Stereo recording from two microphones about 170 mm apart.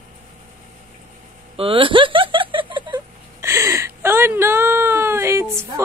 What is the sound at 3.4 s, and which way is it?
Whimper, 15° right (ahead or behind).